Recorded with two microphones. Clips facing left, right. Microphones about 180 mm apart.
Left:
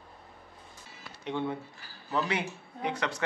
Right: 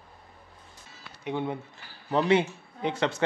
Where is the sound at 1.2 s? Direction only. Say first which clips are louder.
Right 2 dB; 15° right (ahead or behind).